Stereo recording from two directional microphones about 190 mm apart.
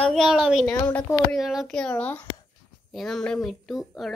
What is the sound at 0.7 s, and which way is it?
Speech, 10° left (ahead or behind).